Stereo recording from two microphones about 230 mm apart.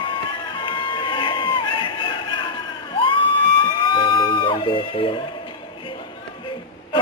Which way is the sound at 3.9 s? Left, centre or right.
Left.